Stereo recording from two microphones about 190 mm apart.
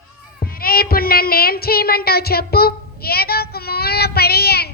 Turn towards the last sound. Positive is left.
turn(degrees=55)  # may be behind; listen again after turning